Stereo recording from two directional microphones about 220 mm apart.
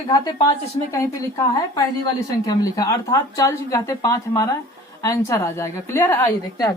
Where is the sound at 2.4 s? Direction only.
15° left (ahead or behind).